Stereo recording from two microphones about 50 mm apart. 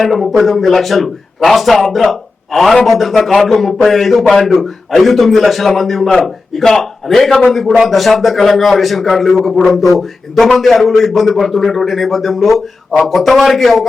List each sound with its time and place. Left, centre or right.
0.0 s a man's voice: centre